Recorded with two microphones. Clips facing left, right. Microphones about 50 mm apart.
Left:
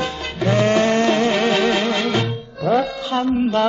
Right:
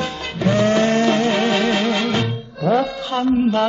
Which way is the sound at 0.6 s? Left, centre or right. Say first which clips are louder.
Even; left.